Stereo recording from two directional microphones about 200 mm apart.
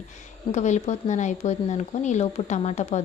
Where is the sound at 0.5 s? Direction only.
35° left (ahead or behind).